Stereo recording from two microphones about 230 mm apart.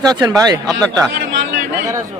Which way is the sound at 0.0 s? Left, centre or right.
Centre.